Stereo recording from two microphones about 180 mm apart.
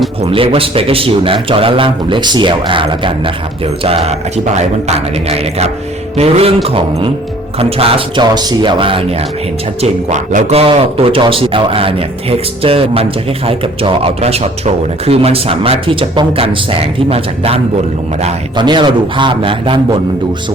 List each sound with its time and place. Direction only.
0.2 s speech: 30° right (ahead or behind)
9.8 s speech: 40° right (ahead or behind)